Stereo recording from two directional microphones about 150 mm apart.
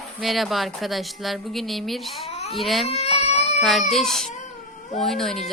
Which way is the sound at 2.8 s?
45° left (ahead or behind).